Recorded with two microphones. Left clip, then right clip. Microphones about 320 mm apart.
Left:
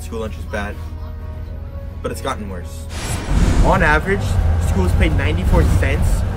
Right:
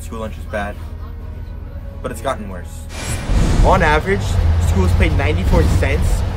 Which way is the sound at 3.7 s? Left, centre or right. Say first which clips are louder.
Right 1 dB; centre.